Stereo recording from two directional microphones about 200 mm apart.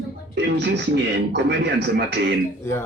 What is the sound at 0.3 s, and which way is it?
Speech, 60° right (ahead or behind).